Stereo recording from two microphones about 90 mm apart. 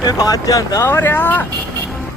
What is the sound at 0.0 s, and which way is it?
Speech, 45° left (ahead or behind).